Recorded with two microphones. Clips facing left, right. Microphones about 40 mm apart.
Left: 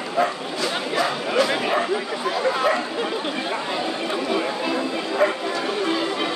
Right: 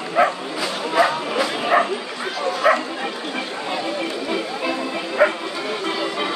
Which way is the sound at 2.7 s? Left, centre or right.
Right.